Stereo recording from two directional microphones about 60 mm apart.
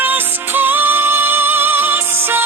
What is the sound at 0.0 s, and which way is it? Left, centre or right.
Music, right.